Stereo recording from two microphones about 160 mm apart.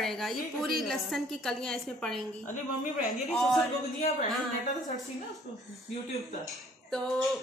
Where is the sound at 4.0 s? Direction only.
50° left (ahead or behind).